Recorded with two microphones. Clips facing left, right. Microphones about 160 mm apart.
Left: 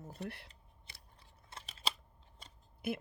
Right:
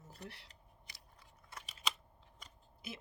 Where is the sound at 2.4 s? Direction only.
30° left (ahead or behind).